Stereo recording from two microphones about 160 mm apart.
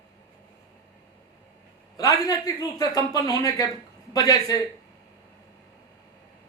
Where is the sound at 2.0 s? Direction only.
25° left (ahead or behind).